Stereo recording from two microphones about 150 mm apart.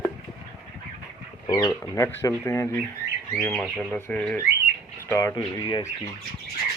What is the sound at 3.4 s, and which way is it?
Speech, centre (ahead or behind).